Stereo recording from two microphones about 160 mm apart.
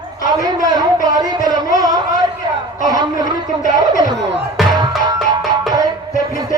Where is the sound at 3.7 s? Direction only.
25° right (ahead or behind).